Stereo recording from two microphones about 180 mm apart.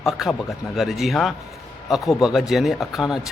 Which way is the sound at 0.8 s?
Centre (ahead or behind).